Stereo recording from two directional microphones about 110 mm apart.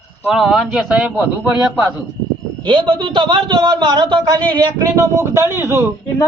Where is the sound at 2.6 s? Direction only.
50° right (ahead or behind).